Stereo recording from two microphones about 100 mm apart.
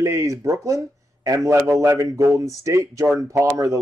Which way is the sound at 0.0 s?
35° right (ahead or behind).